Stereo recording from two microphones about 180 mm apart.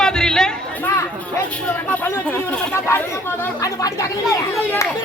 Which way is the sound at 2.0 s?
15° left (ahead or behind).